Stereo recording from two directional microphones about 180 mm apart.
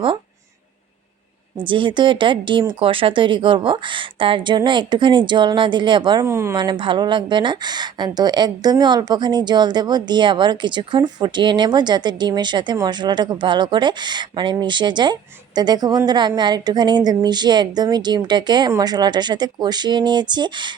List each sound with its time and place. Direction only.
1.5 s speech: 25° right (ahead or behind)